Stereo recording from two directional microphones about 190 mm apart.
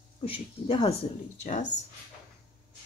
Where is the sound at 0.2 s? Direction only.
30° left (ahead or behind).